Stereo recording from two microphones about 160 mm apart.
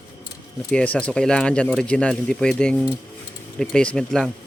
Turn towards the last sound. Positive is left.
turn(degrees=5)  # may be behind; listen again after turning